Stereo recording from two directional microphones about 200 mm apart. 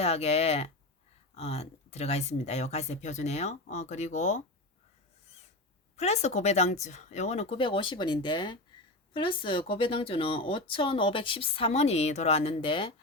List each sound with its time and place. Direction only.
0.0 s a woman's voice: 30° left (ahead or behind)
6.0 s a woman's voice: 35° left (ahead or behind)